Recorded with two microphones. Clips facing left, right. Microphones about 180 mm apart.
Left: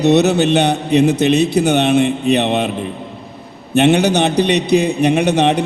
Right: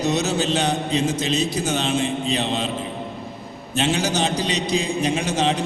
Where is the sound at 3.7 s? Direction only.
65° left (ahead or behind).